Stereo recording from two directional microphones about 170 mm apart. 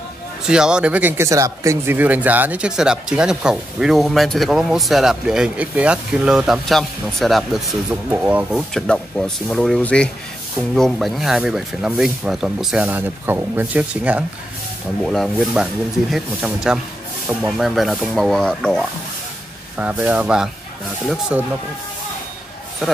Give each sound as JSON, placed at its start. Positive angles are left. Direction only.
{"t": 0.5, "sound": "speech", "side_deg": -5}
{"t": 15.0, "sound": "speech", "side_deg": 0}
{"t": 19.8, "sound": "speech", "side_deg": -10}